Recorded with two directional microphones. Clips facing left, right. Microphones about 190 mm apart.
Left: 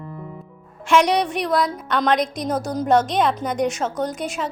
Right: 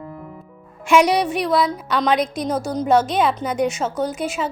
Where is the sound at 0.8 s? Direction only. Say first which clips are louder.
Right 2 dB; 10° right (ahead or behind).